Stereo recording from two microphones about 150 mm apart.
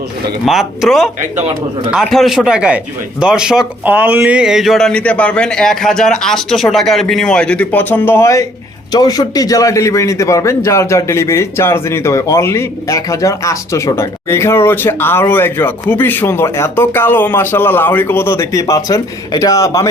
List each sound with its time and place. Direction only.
0.4 s a man's voice: centre (ahead or behind); by 19.9 s 20° left (ahead or behind)